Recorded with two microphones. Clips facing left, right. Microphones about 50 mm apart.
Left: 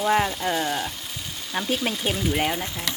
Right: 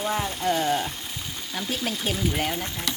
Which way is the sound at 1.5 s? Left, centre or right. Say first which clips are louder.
Left 4 dB; left.